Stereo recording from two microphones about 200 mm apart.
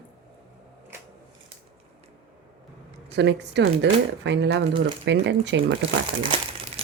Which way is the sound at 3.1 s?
60° right (ahead or behind).